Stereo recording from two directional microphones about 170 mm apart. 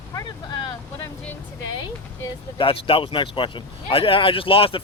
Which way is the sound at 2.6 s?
30° left (ahead or behind).